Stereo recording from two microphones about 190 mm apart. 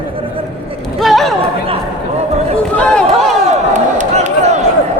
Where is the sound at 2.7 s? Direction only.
5° left (ahead or behind).